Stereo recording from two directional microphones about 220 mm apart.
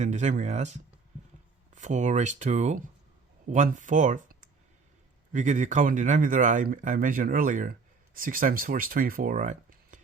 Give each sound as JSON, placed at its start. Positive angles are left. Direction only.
{"t": 0.0, "sound": "speech", "side_deg": -30}